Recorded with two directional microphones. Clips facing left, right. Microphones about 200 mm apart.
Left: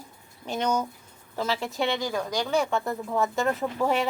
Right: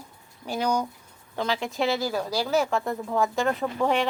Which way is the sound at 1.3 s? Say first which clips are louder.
Right 1 dB; 5° left (ahead or behind).